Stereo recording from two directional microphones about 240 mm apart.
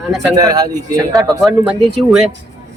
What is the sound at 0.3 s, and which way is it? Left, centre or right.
Speech, centre.